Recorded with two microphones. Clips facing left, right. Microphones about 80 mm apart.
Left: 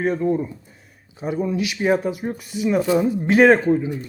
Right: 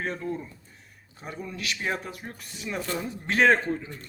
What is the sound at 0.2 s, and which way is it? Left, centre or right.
Speech, left.